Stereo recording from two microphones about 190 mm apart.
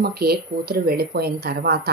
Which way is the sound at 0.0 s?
55° right (ahead or behind).